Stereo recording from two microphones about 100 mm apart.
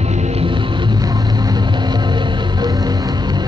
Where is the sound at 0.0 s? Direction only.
85° right.